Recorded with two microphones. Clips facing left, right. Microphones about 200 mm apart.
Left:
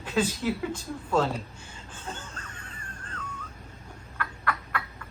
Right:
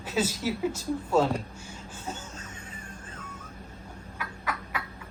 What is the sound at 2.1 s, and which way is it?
Music, 5° right (ahead or behind).